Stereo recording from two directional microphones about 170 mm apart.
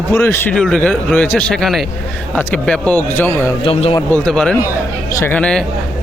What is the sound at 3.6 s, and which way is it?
Speech, 35° left (ahead or behind).